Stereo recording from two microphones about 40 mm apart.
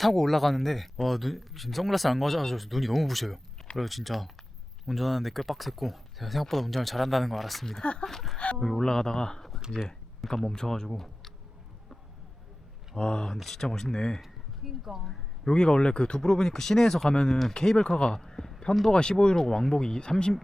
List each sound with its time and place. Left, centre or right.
0.0 s speech: centre
8.8 s speech: centre
13.0 s speech: centre
13.3 s speech: centre
14.2 s speech: centre
15.4 s speech: left
16.2 s speech: centre